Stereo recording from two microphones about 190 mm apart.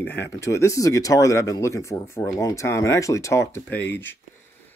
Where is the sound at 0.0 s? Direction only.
10° left (ahead or behind).